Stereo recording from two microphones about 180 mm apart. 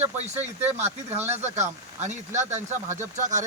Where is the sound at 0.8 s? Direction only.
40° right (ahead or behind).